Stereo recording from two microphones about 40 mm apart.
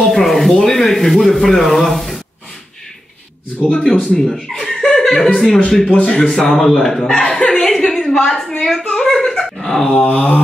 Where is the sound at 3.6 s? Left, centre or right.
Centre.